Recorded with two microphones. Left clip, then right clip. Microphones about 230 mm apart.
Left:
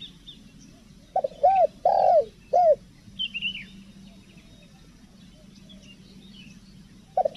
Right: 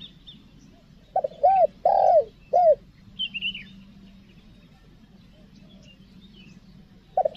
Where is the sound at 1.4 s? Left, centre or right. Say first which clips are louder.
Right 1 dB; centre.